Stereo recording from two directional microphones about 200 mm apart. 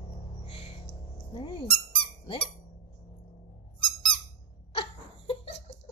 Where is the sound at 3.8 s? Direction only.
Centre (ahead or behind).